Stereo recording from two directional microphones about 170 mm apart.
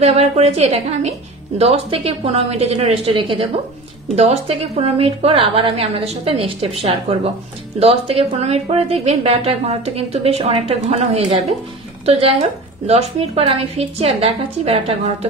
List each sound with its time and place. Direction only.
0.0 s a woman's voice: 40° right (ahead or behind)